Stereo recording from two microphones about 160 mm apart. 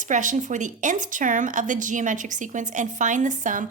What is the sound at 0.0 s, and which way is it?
Speech, 50° right (ahead or behind).